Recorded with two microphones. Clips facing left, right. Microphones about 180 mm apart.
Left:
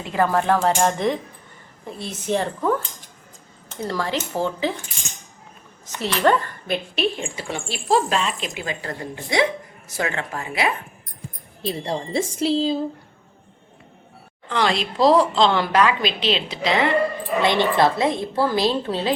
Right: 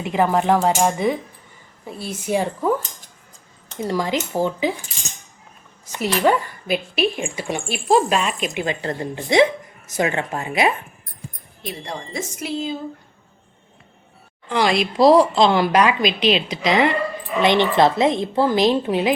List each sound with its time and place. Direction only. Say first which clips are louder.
0.0 s a woman's voice: right 2 dB; 15° right (ahead or behind)
3.8 s a woman's voice: right 3 dB; 15° right (ahead or behind)
5.8 s a sound: right 3 dB; 10° right (ahead or behind)
6.2 s a woman's voice: left 1 dB; 10° right (ahead or behind)
11.6 s a woman's voice: left 5 dB; 30° left (ahead or behind)
14.5 s a woman's voice: right 3 dB; 10° right (ahead or behind)